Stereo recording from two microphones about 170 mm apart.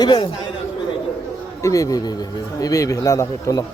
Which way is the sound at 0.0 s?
25° left (ahead or behind).